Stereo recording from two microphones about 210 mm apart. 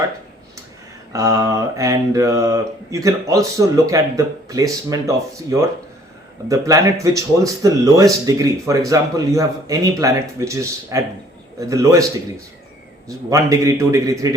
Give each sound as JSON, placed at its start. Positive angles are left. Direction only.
{"t": 1.1, "sound": "speech", "side_deg": -15}
{"t": 13.1, "sound": "speech", "side_deg": -15}